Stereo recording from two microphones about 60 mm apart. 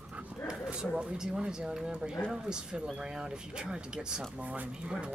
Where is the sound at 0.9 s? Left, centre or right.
Centre.